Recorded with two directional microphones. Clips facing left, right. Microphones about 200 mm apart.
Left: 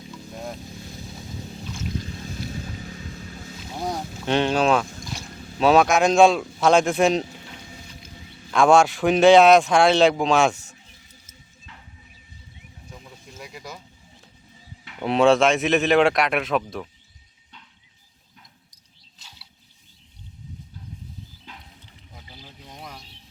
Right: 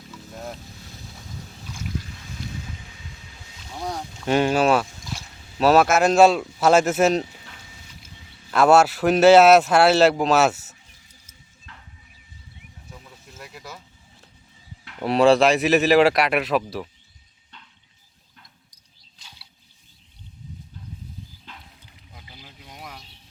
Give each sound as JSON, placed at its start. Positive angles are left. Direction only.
{"t": 0.1, "sound": "boat", "side_deg": 0}
{"t": 2.7, "sound": "boat", "side_deg": 45}
{"t": 3.6, "sound": "speech", "side_deg": 5}
{"t": 13.2, "sound": "a sound", "side_deg": 0}
{"t": 14.8, "sound": "speech", "side_deg": 0}
{"t": 22.1, "sound": "boat", "side_deg": -5}